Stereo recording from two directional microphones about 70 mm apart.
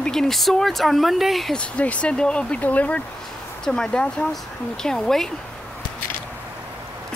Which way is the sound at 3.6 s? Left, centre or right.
Centre.